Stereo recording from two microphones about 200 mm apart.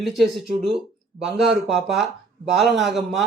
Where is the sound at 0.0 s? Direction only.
Centre (ahead or behind).